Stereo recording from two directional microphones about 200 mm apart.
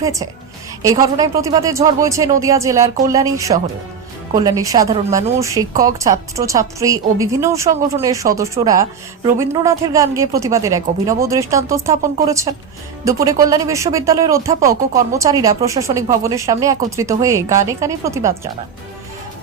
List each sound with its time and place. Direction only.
0.0 s speech: 15° right (ahead or behind)